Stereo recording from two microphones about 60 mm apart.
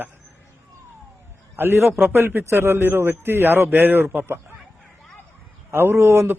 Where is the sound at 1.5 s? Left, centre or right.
Right.